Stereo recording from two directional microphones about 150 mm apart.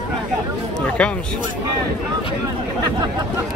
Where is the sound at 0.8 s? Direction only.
5° left (ahead or behind).